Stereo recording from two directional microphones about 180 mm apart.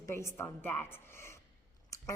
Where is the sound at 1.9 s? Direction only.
15° left (ahead or behind).